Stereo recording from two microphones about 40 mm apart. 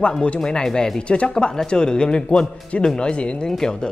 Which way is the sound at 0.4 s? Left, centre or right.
Centre.